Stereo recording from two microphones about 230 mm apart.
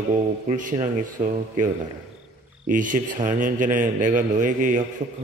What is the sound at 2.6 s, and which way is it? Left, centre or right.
Speech, right.